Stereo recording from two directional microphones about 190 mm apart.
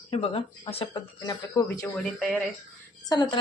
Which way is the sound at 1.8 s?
5° left (ahead or behind).